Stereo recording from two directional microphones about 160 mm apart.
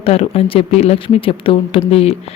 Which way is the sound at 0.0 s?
40° left (ahead or behind).